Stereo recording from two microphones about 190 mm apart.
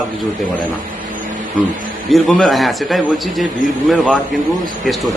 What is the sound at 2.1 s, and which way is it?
A man's voice, centre (ahead or behind).